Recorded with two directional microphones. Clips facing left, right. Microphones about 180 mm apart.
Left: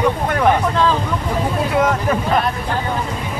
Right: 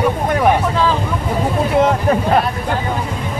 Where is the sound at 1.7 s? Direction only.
30° right (ahead or behind).